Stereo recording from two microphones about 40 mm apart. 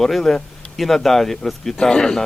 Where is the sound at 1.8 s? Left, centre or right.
Centre.